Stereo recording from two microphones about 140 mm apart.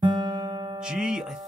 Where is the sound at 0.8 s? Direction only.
5° right (ahead or behind).